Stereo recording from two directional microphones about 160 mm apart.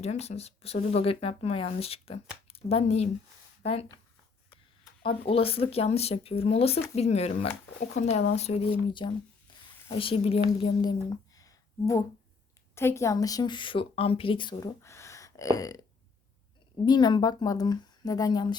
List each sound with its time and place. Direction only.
0.0 s speech: 40° left (ahead or behind)
5.0 s a woman's voice: 35° left (ahead or behind)
11.3 s a sound: 20° left (ahead or behind)
12.7 s a woman's voice: 15° left (ahead or behind)
14.8 s a sound: 15° left (ahead or behind)
15.5 s a woman's voice: 20° left (ahead or behind)
16.8 s a woman's voice: 25° left (ahead or behind)